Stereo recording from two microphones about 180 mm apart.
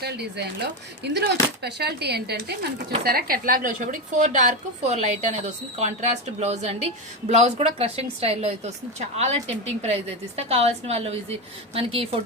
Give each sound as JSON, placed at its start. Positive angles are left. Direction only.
{"t": 0.0, "sound": "speech", "side_deg": -65}